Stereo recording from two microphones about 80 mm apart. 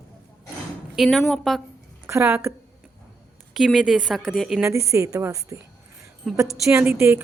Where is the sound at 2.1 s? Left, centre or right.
Right.